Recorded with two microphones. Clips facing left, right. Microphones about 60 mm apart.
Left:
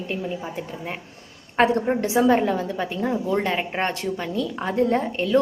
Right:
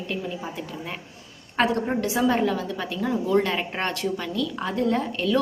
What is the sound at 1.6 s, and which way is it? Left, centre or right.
A woman's voice, left.